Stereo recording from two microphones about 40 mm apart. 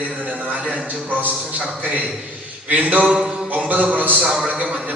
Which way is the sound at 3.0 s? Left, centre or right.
Centre.